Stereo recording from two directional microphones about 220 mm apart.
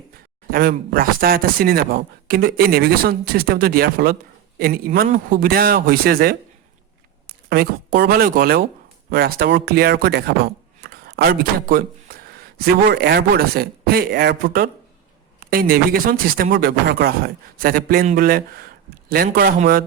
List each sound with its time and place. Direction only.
0.5 s speech: 45° right (ahead or behind)
4.9 s speech: 30° right (ahead or behind)
7.5 s speech: 45° right (ahead or behind)